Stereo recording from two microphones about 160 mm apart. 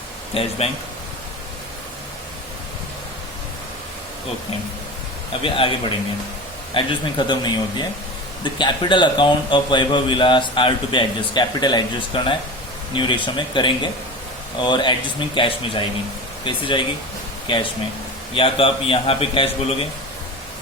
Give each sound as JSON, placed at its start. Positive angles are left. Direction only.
{"t": 0.3, "sound": "a man's voice", "side_deg": 35}
{"t": 5.4, "sound": "a man's voice", "side_deg": 35}